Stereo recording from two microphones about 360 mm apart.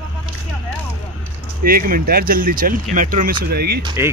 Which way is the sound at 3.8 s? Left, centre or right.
Centre.